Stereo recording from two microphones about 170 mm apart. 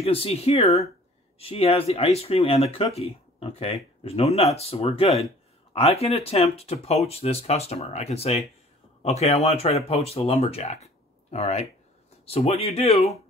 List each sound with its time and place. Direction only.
0.0 s speech: 35° left (ahead or behind)